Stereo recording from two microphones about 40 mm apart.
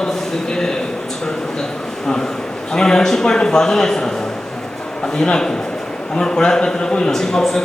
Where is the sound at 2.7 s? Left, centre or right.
Centre.